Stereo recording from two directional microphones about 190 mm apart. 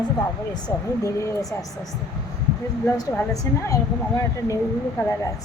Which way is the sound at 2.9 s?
15° left (ahead or behind).